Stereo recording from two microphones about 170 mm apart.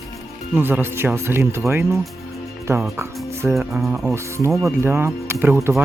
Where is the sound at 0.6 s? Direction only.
10° right (ahead or behind).